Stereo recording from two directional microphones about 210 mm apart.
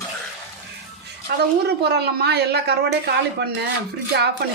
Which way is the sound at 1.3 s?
50° right (ahead or behind).